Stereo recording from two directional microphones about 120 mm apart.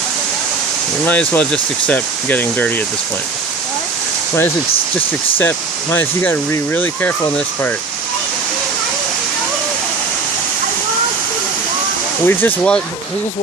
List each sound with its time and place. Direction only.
1.0 s speech: 15° left (ahead or behind)
4.9 s speech: 20° left (ahead or behind)
12.2 s speech: 15° left (ahead or behind)